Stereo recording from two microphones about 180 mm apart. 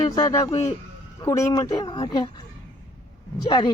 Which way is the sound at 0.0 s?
20° left (ahead or behind).